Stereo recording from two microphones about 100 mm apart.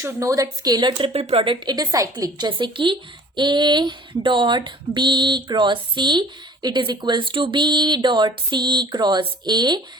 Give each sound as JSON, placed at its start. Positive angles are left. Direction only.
{"t": 0.0, "sound": "speech", "side_deg": -30}
{"t": 1.1, "sound": "speech", "side_deg": -85}
{"t": 2.5, "sound": "speech", "side_deg": -55}